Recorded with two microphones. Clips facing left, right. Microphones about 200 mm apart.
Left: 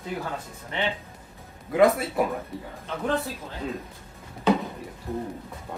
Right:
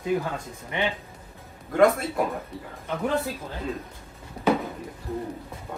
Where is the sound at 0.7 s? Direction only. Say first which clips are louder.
Right 2 dB; 15° right (ahead or behind).